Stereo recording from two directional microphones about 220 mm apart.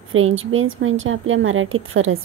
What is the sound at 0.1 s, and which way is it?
A woman's voice, 65° right (ahead or behind).